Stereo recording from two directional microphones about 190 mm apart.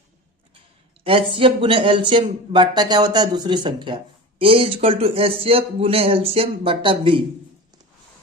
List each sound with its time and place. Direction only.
1.0 s speech: 30° right (ahead or behind)